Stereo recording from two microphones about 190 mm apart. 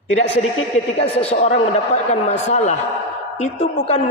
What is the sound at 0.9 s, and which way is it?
A woman's voice, 30° left (ahead or behind).